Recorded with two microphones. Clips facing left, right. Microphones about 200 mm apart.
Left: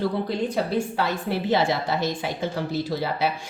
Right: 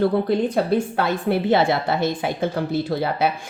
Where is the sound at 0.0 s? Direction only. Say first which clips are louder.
Right 6 dB; 55° right (ahead or behind).